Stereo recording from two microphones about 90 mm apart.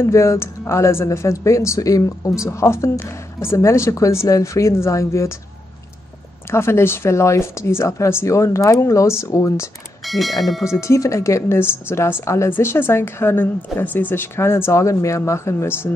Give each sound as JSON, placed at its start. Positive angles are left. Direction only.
{"t": 0.0, "sound": "speech", "side_deg": 35}
{"t": 6.5, "sound": "speech", "side_deg": 30}
{"t": 10.0, "sound": "speech", "side_deg": 0}
{"t": 10.4, "sound": "bell", "side_deg": 0}
{"t": 10.7, "sound": "speech", "side_deg": 35}